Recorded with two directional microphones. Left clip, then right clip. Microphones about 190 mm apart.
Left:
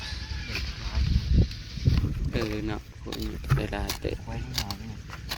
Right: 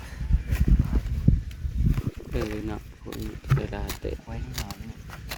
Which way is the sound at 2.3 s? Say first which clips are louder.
Left 1 dB; 15° right (ahead or behind).